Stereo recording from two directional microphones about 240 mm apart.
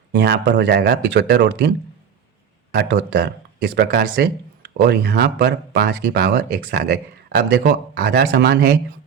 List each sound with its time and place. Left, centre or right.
0.1 s speech: right
2.7 s speech: right